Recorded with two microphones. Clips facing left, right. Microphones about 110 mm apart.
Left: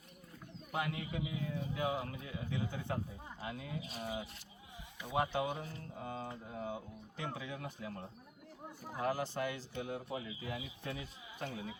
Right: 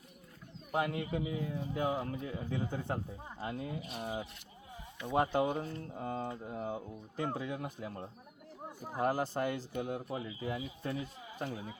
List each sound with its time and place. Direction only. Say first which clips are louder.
0.7 s speech: right 5 dB; 45° right (ahead or behind)